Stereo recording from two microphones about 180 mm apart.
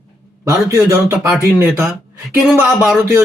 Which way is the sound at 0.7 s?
15° right (ahead or behind).